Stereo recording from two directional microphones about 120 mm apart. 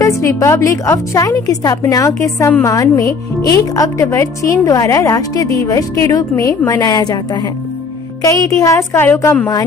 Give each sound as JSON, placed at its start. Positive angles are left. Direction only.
{"t": 0.0, "sound": "a woman's voice", "side_deg": 25}
{"t": 8.2, "sound": "a woman's voice", "side_deg": 30}